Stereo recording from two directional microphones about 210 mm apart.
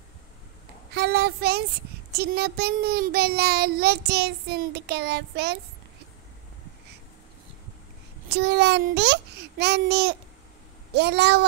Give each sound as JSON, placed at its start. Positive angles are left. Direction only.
{"t": 0.9, "sound": "a child's voice", "side_deg": -50}
{"t": 8.3, "sound": "a child's voice", "side_deg": -50}